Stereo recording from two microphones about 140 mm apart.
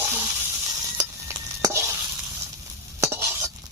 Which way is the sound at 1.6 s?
20° right (ahead or behind).